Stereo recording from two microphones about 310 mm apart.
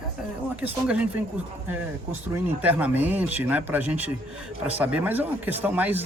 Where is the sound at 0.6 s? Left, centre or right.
Centre.